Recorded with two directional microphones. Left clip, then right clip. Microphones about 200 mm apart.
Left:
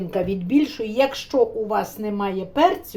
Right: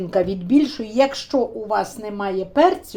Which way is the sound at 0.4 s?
20° right (ahead or behind).